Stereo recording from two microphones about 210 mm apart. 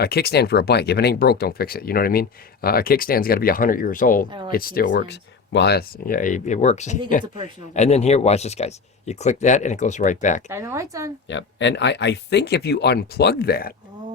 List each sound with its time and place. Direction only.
0.0 s speech: 50° left (ahead or behind)
4.3 s speech: 20° right (ahead or behind)
4.5 s speech: 45° left (ahead or behind)
10.5 s speech: 15° right (ahead or behind)
11.3 s speech: 60° left (ahead or behind)